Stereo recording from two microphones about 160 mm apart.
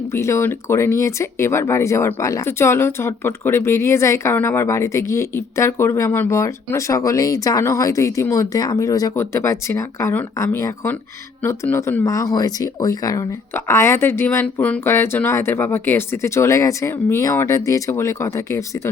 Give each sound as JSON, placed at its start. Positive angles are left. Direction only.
{"t": 0.1, "sound": "speech", "side_deg": 15}